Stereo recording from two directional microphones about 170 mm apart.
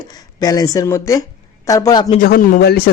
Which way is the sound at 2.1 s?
60° left (ahead or behind).